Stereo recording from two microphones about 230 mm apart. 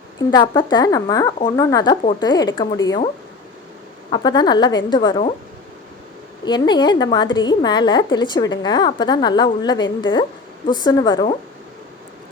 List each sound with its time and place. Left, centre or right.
0.2 s a woman's voice: centre
4.1 s a woman's voice: centre
6.4 s a woman's voice: centre